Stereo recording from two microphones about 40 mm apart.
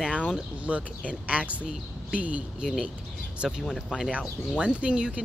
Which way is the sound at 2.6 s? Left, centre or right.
Centre.